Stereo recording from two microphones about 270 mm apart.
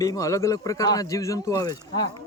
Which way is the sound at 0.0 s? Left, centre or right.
Centre.